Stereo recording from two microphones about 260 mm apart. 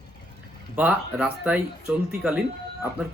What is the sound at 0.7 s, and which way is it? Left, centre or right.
Speech, centre.